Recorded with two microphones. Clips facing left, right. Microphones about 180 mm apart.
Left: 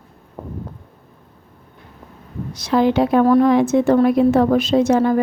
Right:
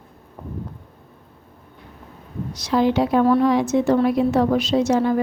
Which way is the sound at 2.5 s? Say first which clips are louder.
Left 3 dB; 55° left (ahead or behind).